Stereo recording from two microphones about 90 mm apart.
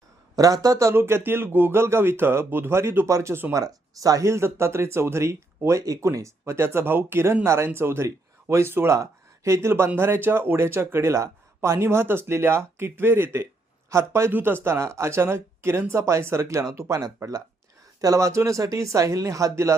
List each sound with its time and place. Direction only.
0.3 s speech: 40° right (ahead or behind)
0.9 s speech: 25° right (ahead or behind)
3.6 s speech: 40° right (ahead or behind)